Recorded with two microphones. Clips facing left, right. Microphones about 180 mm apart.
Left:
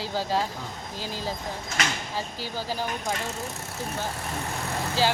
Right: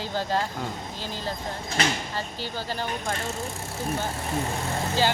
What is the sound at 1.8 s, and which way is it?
Speech, 30° right (ahead or behind).